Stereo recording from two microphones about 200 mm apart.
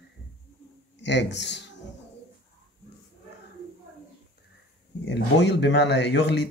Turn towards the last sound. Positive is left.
turn(degrees=60)  # may be behind; listen again after turning